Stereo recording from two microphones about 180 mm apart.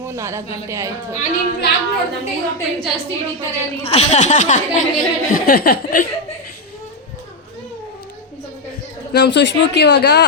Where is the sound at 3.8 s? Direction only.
35° left (ahead or behind).